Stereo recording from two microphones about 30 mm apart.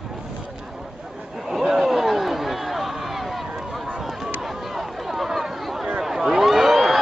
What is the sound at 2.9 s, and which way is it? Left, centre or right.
Run, centre.